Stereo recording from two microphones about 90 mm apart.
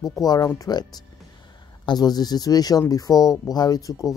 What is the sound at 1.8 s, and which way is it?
Speech, 50° left (ahead or behind).